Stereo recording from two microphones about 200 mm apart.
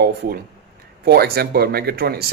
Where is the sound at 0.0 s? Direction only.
55° right (ahead or behind).